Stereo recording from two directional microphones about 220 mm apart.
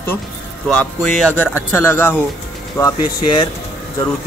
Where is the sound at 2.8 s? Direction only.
20° left (ahead or behind).